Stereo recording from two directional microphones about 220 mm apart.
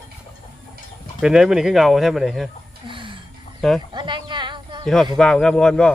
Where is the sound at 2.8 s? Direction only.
20° right (ahead or behind).